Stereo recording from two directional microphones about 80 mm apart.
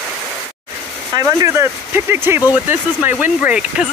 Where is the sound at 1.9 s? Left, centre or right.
Right.